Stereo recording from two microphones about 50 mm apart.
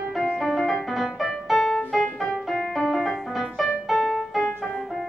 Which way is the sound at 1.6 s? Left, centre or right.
Centre.